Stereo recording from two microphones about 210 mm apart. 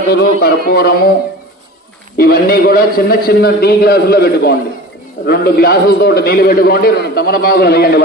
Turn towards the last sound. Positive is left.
turn(degrees=50)  # may be behind; listen again after turning